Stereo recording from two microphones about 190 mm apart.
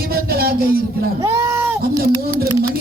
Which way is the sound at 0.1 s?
55° right (ahead or behind).